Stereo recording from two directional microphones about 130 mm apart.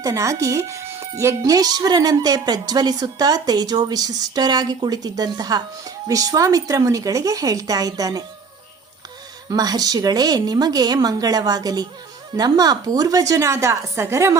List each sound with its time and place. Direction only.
0.0 s speech: 25° right (ahead or behind)
9.5 s speech: 30° right (ahead or behind)